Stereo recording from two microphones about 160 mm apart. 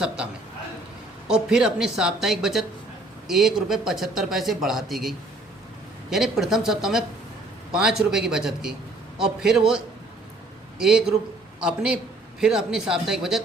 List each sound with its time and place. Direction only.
1.3 s a man's voice: 5° right (ahead or behind)